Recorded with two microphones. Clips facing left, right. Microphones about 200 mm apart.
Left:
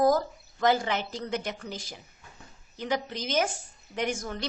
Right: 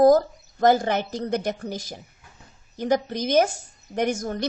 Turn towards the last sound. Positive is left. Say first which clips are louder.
# right 6 dB
turn(degrees=-45)  # may be behind; listen again after turning